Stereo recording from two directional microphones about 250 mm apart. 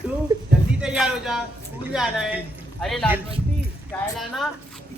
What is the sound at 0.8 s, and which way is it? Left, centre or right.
A woman's voice, centre.